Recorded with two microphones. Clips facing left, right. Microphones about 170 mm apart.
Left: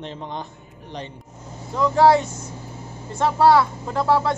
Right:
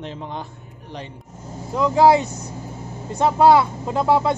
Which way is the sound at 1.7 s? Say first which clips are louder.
Right 1 dB; 10° right (ahead or behind).